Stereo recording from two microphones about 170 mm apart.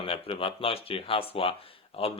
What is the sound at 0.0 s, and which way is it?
Speech, 35° left (ahead or behind).